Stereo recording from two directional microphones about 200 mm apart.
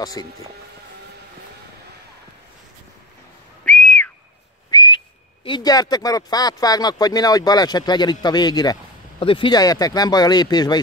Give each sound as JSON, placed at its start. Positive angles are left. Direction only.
{"t": 0.0, "sound": "speech", "side_deg": 20}
{"t": 3.6, "sound": "whistle", "side_deg": 5}
{"t": 4.6, "sound": "whistle", "side_deg": 20}
{"t": 9.2, "sound": "speech", "side_deg": 25}